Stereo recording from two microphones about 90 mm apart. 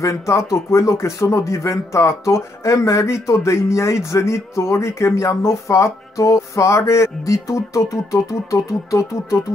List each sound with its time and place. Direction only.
0.0 s speech: 35° left (ahead or behind)